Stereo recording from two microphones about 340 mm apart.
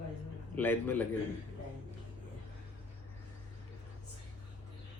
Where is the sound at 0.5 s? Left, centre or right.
Centre.